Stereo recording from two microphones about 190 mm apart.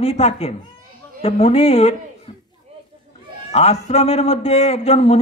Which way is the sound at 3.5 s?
35° left (ahead or behind).